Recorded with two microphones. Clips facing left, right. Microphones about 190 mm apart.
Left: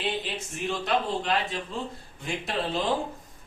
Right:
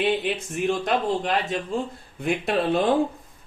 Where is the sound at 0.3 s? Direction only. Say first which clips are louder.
Right 7 dB; 50° right (ahead or behind).